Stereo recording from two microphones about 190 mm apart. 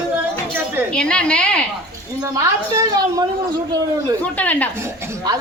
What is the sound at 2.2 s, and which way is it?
Speech, 15° right (ahead or behind).